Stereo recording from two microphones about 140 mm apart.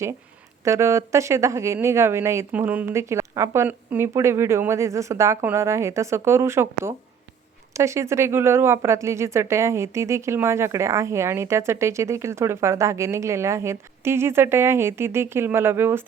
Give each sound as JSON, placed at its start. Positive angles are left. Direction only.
{"t": 0.6, "sound": "speech", "side_deg": -20}